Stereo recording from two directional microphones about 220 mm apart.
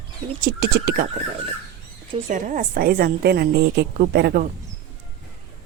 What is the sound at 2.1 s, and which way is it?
A woman's voice, 30° right (ahead or behind).